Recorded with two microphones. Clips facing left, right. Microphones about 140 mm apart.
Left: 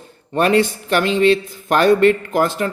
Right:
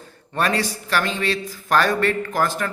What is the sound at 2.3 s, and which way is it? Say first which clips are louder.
Speech: left 5 dB; 20° left (ahead or behind).